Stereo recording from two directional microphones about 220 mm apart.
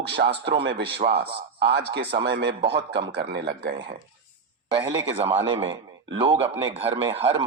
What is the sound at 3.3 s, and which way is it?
Speech, 50° right (ahead or behind).